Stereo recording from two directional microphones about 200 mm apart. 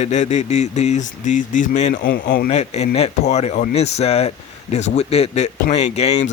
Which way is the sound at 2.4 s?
35° left (ahead or behind).